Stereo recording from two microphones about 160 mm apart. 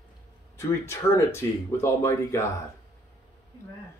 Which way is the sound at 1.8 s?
15° left (ahead or behind).